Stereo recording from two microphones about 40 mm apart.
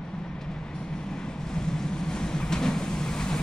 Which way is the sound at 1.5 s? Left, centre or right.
Centre.